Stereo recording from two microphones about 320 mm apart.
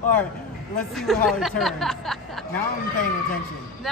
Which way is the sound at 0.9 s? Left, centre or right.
Centre.